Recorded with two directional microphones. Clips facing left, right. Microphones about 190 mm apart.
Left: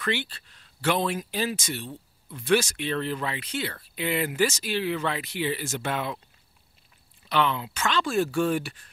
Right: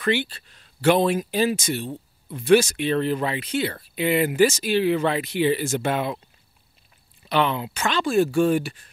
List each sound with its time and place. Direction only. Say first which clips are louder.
0.0 s speech: right 6 dB; 10° right (ahead or behind)
7.2 s speech: right 3 dB; 15° right (ahead or behind)